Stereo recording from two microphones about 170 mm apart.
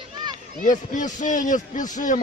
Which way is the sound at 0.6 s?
50° left (ahead or behind).